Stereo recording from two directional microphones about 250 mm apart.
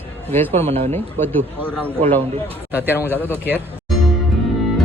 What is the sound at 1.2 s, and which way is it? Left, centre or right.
Speech, centre.